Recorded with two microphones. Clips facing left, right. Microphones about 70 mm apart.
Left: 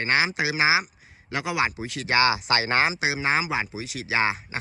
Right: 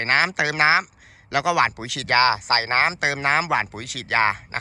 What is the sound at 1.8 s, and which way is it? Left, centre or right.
Speech, right.